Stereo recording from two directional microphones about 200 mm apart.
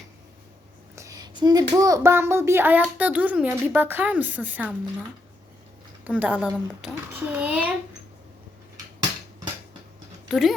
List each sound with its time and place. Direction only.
0.9 s a sound: 15° right (ahead or behind)
1.7 s a child's voice: 20° right (ahead or behind)
6.1 s a child's voice: 5° right (ahead or behind)
10.2 s speech: centre (ahead or behind)